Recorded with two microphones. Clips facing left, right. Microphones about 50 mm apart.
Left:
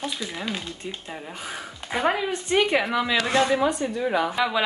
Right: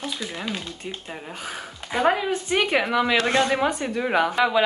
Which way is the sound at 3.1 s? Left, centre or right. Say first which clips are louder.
Right 1 dB; right.